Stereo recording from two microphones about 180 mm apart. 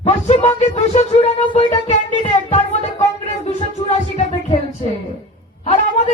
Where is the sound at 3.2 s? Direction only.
40° left (ahead or behind).